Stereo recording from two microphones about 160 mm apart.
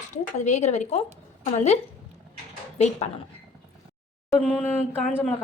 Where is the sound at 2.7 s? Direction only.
40° left (ahead or behind).